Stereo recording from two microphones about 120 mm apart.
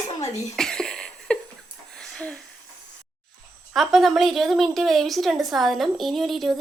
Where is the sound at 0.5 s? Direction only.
5° left (ahead or behind).